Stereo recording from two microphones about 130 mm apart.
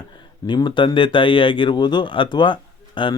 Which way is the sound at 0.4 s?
35° left (ahead or behind).